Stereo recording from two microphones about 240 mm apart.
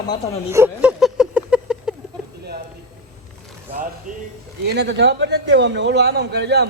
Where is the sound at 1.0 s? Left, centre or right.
Centre.